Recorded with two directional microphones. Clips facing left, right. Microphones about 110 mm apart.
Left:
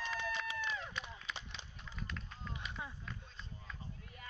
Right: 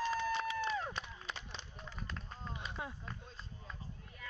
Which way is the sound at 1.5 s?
40° right (ahead or behind).